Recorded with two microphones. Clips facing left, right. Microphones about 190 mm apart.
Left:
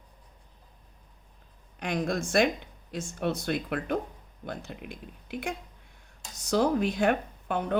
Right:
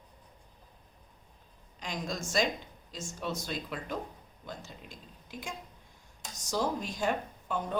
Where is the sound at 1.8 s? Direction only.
60° left (ahead or behind).